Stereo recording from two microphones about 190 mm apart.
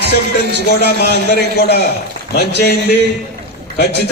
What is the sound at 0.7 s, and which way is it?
Speech, 60° left (ahead or behind).